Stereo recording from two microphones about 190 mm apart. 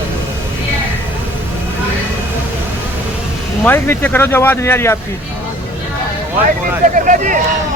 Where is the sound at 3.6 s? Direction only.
10° left (ahead or behind).